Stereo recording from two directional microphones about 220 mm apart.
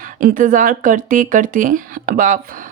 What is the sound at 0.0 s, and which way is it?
Speech, 40° right (ahead or behind).